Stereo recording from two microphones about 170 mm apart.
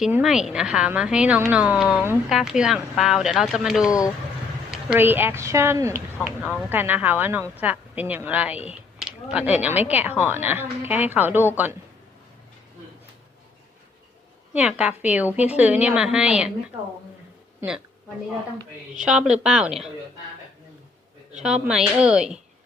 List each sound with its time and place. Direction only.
0.0 s a woman's voice: 5° right (ahead or behind)
3.8 s speech: 20° left (ahead or behind)
4.7 s a woman's voice: 10° right (ahead or behind)
6.2 s a woman's voice: 5° right (ahead or behind)
14.5 s a woman's voice: 5° right (ahead or behind)
19.0 s a woman's voice: 5° right (ahead or behind)
21.3 s a woman's voice: 5° right (ahead or behind)